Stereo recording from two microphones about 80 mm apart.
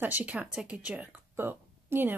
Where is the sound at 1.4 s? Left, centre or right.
Right.